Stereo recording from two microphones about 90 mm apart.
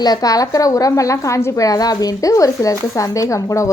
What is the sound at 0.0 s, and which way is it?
A woman's voice, 45° left (ahead or behind).